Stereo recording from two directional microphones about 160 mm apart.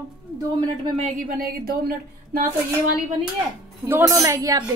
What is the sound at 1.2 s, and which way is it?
Speech, 65° right (ahead or behind).